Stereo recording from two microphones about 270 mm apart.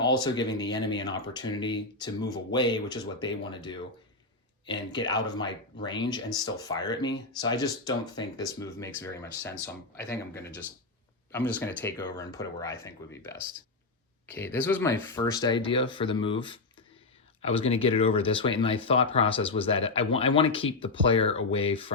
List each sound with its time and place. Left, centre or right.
0.0 s speech: centre
14.3 s speech: centre